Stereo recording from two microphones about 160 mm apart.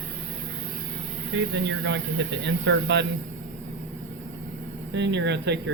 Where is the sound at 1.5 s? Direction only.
90° right.